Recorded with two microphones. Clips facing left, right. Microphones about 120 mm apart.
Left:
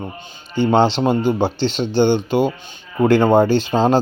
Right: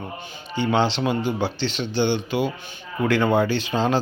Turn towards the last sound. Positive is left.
turn(degrees=35)  # may be behind; listen again after turning